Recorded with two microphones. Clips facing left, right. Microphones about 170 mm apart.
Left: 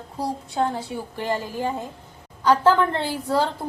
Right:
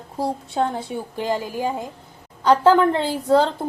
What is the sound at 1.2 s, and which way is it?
Speech, 15° right (ahead or behind).